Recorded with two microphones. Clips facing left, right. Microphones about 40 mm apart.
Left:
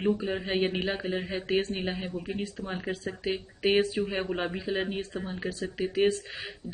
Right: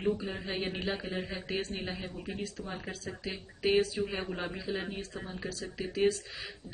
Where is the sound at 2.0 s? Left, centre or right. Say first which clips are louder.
Left 6 dB; centre.